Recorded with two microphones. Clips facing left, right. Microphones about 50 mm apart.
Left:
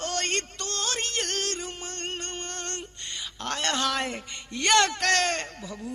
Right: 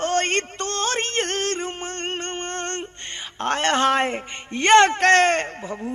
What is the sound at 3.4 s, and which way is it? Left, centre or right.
Speech, right.